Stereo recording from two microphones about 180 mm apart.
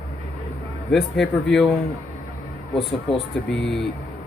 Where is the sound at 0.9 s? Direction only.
Centre (ahead or behind).